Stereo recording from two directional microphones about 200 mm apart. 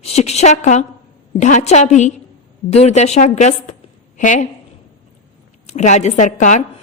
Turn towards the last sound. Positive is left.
turn(degrees=35)  # may be behind; listen again after turning